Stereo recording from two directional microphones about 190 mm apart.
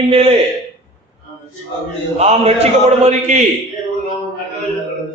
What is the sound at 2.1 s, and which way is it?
Speech, 35° right (ahead or behind).